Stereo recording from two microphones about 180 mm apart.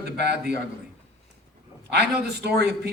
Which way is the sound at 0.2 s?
65° right (ahead or behind).